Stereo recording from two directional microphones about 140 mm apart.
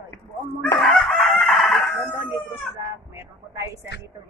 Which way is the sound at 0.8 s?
Centre (ahead or behind).